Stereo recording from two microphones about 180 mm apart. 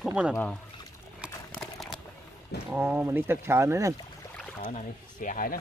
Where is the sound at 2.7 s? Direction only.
10° right (ahead or behind).